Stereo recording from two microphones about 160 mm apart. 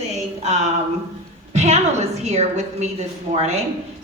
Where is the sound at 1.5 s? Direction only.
45° right (ahead or behind).